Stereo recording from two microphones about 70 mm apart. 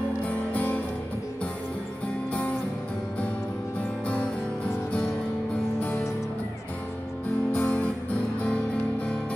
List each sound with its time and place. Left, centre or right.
0.2 s music: left
5.8 s music: centre
7.5 s music: centre